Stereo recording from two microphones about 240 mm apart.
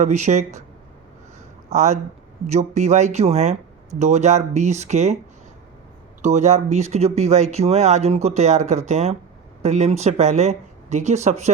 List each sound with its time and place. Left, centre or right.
0.0 s speech: right
1.7 s speech: right
6.2 s speech: right